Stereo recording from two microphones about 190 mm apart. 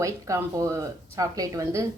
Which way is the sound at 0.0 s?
15° right (ahead or behind).